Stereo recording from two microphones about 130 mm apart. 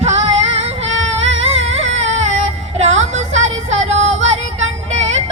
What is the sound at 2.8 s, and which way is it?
Music, 60° right (ahead or behind).